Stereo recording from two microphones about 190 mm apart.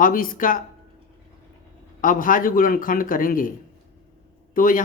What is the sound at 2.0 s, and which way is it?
Speech, 45° left (ahead or behind).